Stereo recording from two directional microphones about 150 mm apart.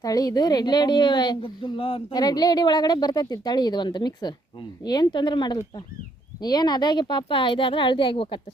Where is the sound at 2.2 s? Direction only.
25° left (ahead or behind).